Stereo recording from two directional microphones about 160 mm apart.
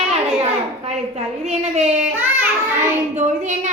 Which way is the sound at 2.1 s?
10° right (ahead or behind).